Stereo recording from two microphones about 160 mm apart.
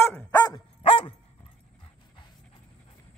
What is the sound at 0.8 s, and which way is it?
Dog, 35° left (ahead or behind).